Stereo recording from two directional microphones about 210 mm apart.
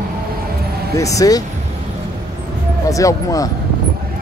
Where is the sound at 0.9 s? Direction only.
15° left (ahead or behind).